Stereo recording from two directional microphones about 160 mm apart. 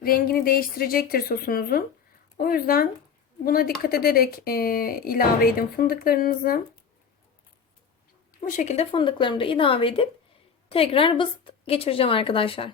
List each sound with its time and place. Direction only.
0.0 s speech: 65° left (ahead or behind)
8.4 s a woman's voice: 50° left (ahead or behind)